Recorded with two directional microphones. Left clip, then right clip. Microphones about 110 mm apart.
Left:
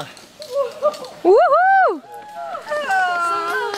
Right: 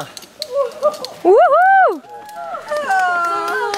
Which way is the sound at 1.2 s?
25° left (ahead or behind).